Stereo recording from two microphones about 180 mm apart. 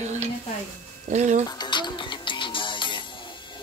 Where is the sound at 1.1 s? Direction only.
40° right (ahead or behind).